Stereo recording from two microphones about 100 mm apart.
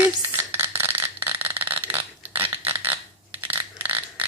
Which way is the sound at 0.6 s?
20° right (ahead or behind).